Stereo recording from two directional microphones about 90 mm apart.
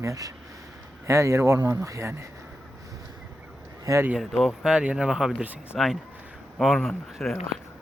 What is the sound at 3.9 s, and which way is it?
Speech, 40° right (ahead or behind).